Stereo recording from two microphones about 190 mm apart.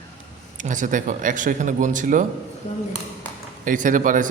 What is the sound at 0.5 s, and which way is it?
A man's voice, 45° right (ahead or behind).